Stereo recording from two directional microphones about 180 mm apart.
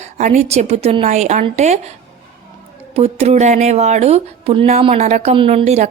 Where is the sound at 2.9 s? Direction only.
35° right (ahead or behind).